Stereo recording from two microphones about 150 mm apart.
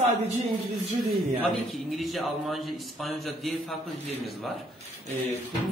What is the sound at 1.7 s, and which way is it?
Speech, centre (ahead or behind).